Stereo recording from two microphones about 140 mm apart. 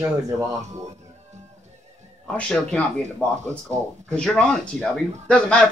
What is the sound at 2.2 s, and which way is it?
Speech, 5° left (ahead or behind).